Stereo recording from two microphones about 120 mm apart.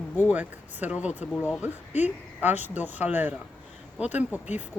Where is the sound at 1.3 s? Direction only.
15° left (ahead or behind).